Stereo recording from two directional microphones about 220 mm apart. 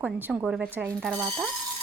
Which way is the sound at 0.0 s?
5° right (ahead or behind).